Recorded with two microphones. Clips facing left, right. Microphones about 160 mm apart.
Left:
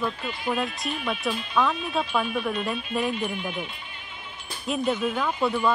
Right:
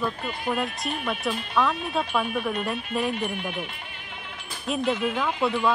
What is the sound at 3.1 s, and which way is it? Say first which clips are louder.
Speech: even; 60° right (ahead or behind).